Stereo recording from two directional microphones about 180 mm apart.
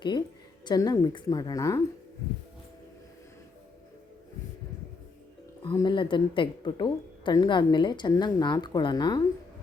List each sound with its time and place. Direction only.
0.6 s a woman's voice: 20° left (ahead or behind)
5.7 s a woman's voice: 25° left (ahead or behind)